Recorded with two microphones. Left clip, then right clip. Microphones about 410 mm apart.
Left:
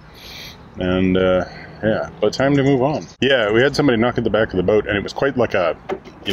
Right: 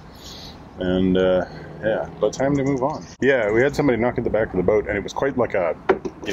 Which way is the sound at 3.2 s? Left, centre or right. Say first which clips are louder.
Left 2 dB; left.